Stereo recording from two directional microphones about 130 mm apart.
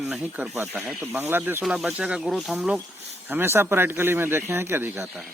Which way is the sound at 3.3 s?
20° right (ahead or behind).